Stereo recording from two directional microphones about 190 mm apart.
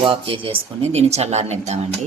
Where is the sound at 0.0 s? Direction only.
30° right (ahead or behind).